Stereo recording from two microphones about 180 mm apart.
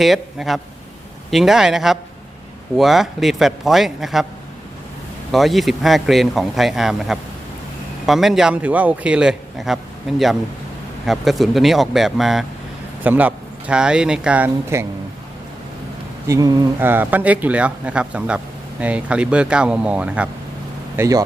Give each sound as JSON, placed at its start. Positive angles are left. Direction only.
{"t": 0.0, "sound": "a man's voice", "side_deg": 0}
{"t": 5.3, "sound": "a man's voice", "side_deg": 0}
{"t": 16.2, "sound": "speech", "side_deg": -20}